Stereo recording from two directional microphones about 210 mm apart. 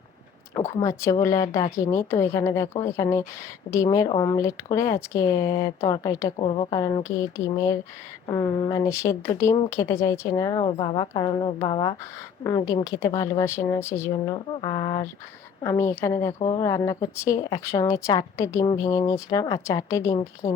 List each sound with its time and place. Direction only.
0.5 s a woman's voice: 15° left (ahead or behind)
14.3 s a woman's voice: 25° left (ahead or behind)